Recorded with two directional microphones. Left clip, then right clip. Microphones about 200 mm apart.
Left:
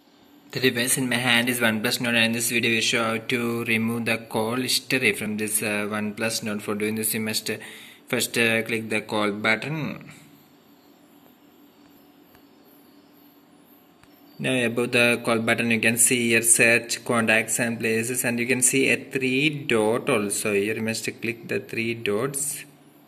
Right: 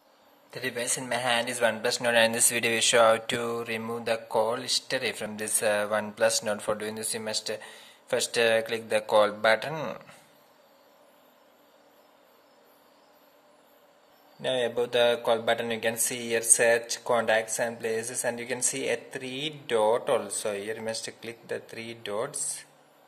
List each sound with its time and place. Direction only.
0.5 s speech: 10° right (ahead or behind)
5.3 s speech: 30° right (ahead or behind)
14.4 s speech: 10° right (ahead or behind)